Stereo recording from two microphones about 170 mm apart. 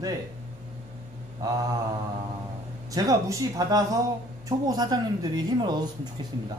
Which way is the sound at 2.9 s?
20° right (ahead or behind).